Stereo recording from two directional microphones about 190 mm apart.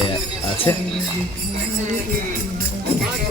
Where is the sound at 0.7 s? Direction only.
20° left (ahead or behind).